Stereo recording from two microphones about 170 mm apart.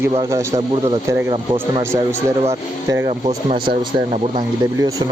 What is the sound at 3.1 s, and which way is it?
Speech, 40° right (ahead or behind).